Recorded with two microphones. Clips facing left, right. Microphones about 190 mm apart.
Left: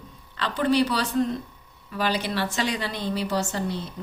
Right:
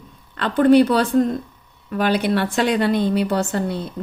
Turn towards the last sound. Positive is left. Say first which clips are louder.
# right 5 dB
turn(degrees=-55)  # may be behind; listen again after turning